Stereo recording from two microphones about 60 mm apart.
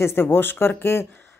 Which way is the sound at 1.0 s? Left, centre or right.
Left.